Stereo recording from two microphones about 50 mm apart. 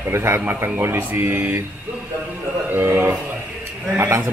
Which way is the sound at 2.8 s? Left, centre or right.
Right.